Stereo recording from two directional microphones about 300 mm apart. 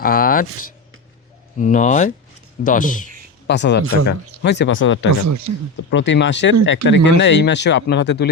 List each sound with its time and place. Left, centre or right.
0.0 s speech: left
1.5 s speech: left
5.1 s speech: right
5.9 s speech: left